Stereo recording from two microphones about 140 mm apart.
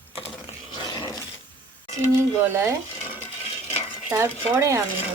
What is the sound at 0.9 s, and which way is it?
Dog, 30° left (ahead or behind).